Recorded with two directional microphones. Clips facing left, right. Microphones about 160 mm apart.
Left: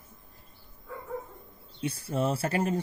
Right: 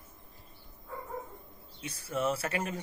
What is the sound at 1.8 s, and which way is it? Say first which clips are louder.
Speech: left 4 dB; 30° left (ahead or behind).